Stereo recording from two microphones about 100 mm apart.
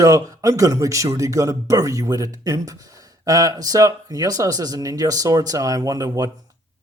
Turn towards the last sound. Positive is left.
turn(degrees=-40)  # may be behind; listen again after turning